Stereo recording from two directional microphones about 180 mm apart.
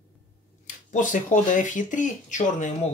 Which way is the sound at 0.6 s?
45° left (ahead or behind).